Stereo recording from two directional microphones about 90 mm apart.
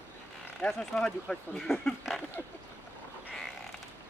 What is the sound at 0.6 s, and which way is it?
Speech, 5° left (ahead or behind).